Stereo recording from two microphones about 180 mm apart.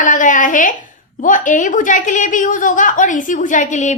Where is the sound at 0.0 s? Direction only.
45° left (ahead or behind).